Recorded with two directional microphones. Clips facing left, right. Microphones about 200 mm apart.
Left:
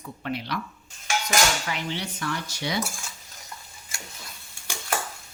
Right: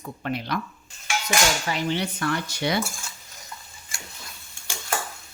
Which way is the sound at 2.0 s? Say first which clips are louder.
Right 5 dB; 60° right (ahead or behind).